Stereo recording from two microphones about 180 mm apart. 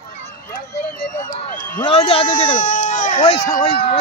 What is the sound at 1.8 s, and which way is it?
Speech, 30° left (ahead or behind).